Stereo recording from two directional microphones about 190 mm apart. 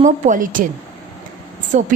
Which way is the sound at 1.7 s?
40° right (ahead or behind).